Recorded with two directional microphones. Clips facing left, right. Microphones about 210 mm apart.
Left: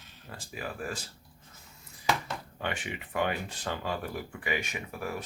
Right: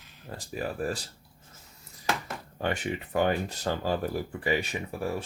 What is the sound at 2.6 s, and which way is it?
Speech, 40° right (ahead or behind).